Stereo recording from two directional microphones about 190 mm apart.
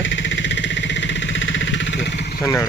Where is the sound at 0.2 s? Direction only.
70° left (ahead or behind).